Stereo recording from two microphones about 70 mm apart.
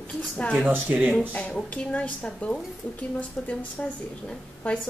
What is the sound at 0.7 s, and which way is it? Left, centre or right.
Speech, right.